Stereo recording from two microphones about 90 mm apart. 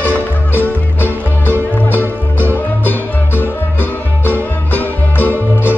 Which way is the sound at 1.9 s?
20° left (ahead or behind).